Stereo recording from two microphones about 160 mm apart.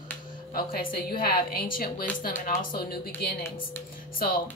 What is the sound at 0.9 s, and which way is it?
A woman's voice, 65° left (ahead or behind).